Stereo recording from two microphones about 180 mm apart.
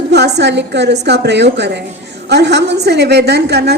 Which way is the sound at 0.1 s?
70° right (ahead or behind).